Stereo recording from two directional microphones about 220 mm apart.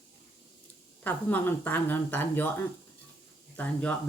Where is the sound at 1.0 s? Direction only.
10° left (ahead or behind).